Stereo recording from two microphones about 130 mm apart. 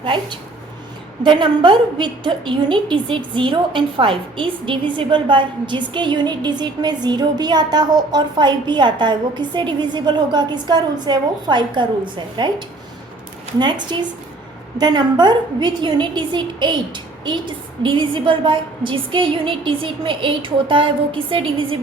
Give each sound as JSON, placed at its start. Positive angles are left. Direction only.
{"t": 0.0, "sound": "a woman's voice", "side_deg": -40}